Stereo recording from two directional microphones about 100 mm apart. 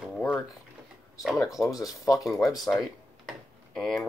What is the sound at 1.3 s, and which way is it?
Speech, 35° left (ahead or behind).